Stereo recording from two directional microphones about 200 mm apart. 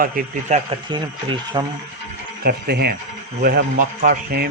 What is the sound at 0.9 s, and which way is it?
Speech, 25° right (ahead or behind).